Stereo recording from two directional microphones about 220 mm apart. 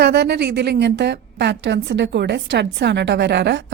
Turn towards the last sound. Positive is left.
turn(degrees=-50)  # may be behind; listen again after turning